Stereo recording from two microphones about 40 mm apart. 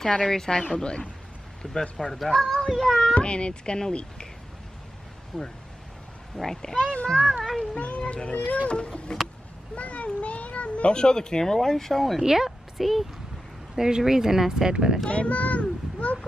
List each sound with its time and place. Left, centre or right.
0.1 s speech: centre
1.6 s speech: centre
3.2 s speech: left
5.3 s speech: centre
7.2 s speech: centre
7.7 s a sound: left
8.6 s cat: left
9.8 s speech: left; by 12.2 s centre
12.2 s a woman's voice: centre
13.7 s speech: centre
15.0 s a sound: left